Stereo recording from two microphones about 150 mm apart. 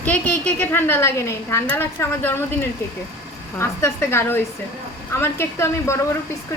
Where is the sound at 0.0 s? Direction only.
10° left (ahead or behind).